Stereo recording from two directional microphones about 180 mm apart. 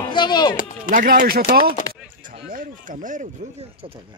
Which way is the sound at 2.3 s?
50° right (ahead or behind).